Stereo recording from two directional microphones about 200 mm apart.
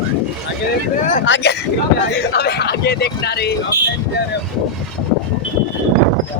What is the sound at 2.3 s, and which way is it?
Speech, 55° left (ahead or behind).